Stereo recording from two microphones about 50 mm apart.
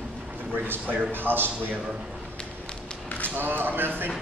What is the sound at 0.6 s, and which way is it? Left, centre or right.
Speech, right.